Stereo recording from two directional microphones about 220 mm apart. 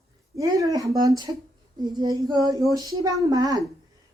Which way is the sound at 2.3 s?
20° right (ahead or behind).